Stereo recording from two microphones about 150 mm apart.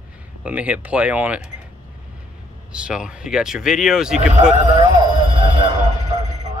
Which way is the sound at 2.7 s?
5° right (ahead or behind).